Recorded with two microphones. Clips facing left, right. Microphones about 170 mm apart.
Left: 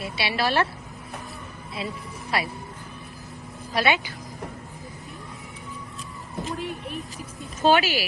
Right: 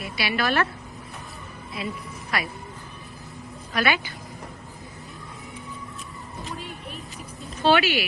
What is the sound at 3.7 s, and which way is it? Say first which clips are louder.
Speech: left 1 dB; 25° left (ahead or behind).